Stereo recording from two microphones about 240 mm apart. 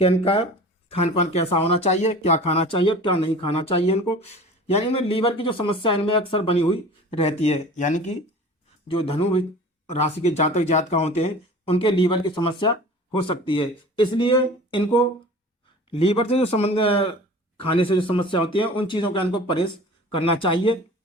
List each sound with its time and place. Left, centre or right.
0.0 s speech: left